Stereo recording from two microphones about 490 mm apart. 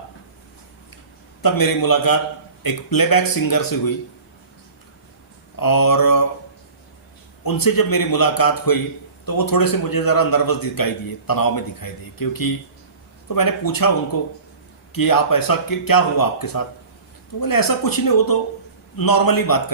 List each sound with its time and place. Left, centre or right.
1.4 s speech: left
5.5 s speech: left
7.4 s speech: left
14.9 s speech: left